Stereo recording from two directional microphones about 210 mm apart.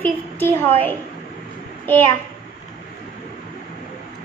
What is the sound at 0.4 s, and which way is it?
Speech, 10° left (ahead or behind).